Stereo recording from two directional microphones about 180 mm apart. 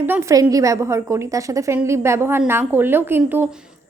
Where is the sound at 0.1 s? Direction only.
15° right (ahead or behind).